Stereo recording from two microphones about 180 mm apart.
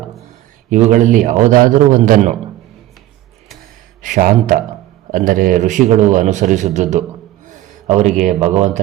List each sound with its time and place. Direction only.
0.7 s a man's voice: 40° right (ahead or behind)
4.0 s a man's voice: 50° right (ahead or behind)